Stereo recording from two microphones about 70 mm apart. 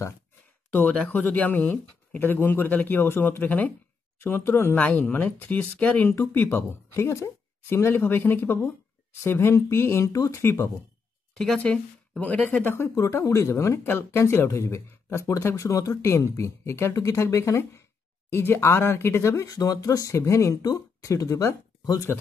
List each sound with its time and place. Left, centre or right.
1.1 s speech: left
4.2 s speech: left
4.7 s speech: left
6.9 s speech: left
10.1 s speech: left
10.4 s speech: left
11.3 s a woman's voice: centre
12.2 s speech: left
12.9 s speech: left
19.5 s speech: left
20.6 s speech: left